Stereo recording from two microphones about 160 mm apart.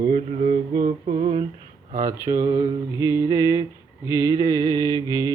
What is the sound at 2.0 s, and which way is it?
Mantra, 20° right (ahead or behind).